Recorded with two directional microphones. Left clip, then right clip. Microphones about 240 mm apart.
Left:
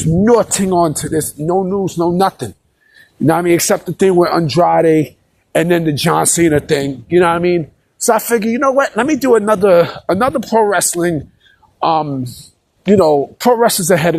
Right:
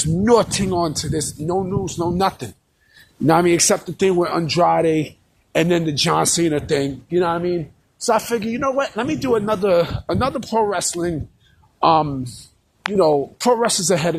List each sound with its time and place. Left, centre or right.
0.3 s speech: left